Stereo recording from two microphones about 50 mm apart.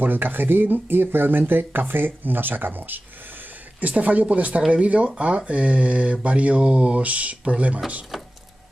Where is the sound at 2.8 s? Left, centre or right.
Right.